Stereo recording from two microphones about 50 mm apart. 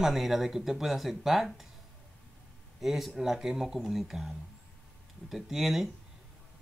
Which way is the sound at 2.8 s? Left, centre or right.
Centre.